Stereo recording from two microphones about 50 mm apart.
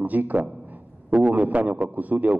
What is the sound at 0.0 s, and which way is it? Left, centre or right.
A man's voice, right.